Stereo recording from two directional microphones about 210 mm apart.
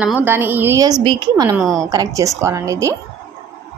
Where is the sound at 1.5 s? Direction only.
Centre (ahead or behind).